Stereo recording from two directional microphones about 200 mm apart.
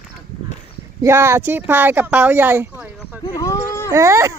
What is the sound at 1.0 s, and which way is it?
Speech, 10° right (ahead or behind).